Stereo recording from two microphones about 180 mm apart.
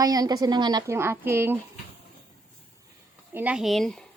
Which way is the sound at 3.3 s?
10° right (ahead or behind).